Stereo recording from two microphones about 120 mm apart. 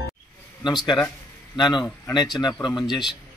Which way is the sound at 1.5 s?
40° left (ahead or behind).